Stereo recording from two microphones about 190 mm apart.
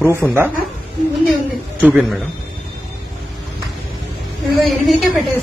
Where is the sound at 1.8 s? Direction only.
5° right (ahead or behind).